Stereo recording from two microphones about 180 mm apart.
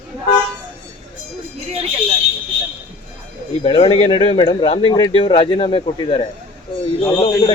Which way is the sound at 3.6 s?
30° left (ahead or behind).